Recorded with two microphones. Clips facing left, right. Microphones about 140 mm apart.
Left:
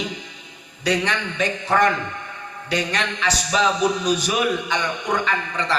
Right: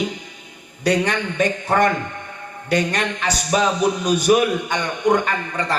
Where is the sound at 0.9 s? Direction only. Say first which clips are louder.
Right 3 dB; 50° right (ahead or behind).